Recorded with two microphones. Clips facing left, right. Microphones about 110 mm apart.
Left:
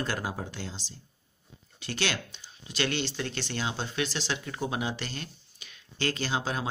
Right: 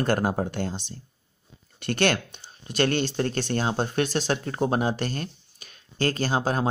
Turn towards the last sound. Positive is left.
turn(degrees=-45)  # may be behind; listen again after turning